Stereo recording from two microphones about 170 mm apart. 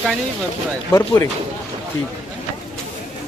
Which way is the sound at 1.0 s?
15° left (ahead or behind).